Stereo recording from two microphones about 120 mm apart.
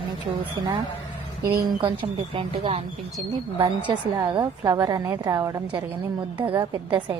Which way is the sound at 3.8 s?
35° right (ahead or behind).